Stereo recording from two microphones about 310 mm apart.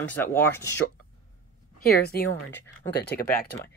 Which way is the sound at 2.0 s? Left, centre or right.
Left.